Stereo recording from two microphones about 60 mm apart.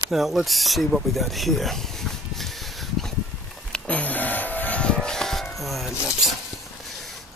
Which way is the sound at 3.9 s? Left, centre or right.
Left.